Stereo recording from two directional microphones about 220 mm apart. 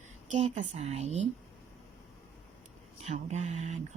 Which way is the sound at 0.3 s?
30° right (ahead or behind).